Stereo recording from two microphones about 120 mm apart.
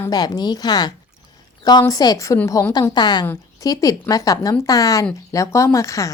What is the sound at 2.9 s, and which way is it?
A woman's voice, 35° left (ahead or behind).